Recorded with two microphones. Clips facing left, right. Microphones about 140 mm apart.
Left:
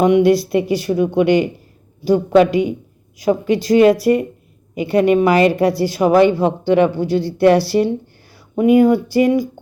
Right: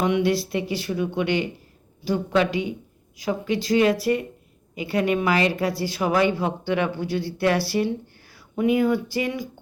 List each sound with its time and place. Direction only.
0.0 s a woman's voice: 45° left (ahead or behind)
5.9 s a woman's voice: 45° left (ahead or behind)